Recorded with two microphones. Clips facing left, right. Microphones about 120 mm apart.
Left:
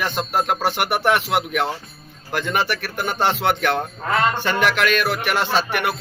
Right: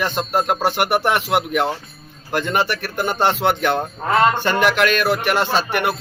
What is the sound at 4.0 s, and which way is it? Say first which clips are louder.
Speech: right 7 dB; 25° right (ahead or behind).